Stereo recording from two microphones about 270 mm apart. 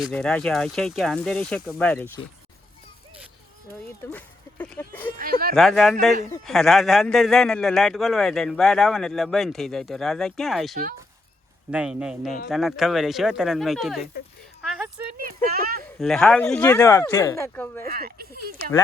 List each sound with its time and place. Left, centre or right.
0.0 s speech: centre
4.0 s speech: centre
5.1 s speech: right
5.5 s speech: centre
15.2 s a sound: right
16.0 s speech: centre
17.8 s speech: right